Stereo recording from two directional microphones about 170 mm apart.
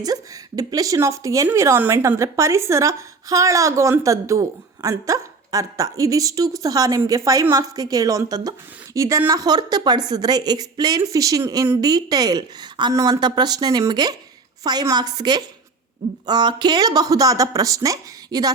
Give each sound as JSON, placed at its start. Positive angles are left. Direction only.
{"t": 0.0, "sound": "speech", "side_deg": -20}